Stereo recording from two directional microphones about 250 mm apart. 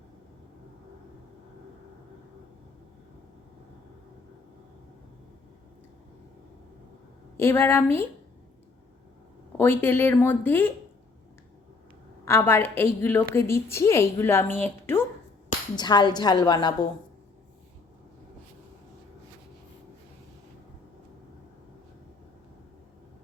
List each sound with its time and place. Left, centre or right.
7.3 s a woman's voice: centre
9.6 s a woman's voice: centre
12.2 s a woman's voice: centre